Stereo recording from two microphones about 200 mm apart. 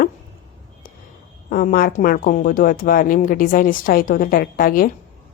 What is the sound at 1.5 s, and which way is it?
A woman's voice, 45° left (ahead or behind).